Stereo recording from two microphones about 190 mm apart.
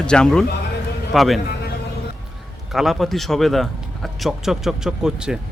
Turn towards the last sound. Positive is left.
turn(degrees=-5)  # may be behind; listen again after turning